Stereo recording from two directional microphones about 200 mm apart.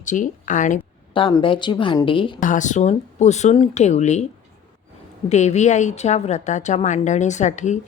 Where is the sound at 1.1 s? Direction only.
25° left (ahead or behind).